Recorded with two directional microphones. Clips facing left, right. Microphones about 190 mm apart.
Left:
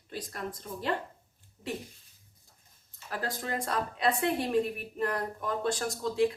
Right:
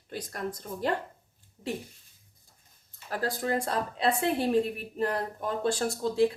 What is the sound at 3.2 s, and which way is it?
Speech, 35° right (ahead or behind).